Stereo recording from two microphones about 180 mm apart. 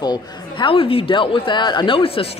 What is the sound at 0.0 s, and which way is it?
Speech, 25° left (ahead or behind).